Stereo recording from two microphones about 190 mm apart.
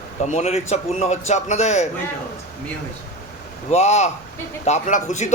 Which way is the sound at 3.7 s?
35° left (ahead or behind).